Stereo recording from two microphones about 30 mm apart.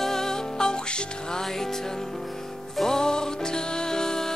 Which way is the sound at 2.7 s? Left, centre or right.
Centre.